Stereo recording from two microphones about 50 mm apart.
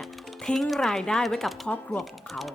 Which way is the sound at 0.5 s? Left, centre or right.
Centre.